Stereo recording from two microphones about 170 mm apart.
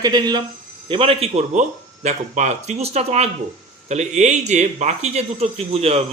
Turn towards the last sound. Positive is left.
turn(degrees=-35)  # may be behind; listen again after turning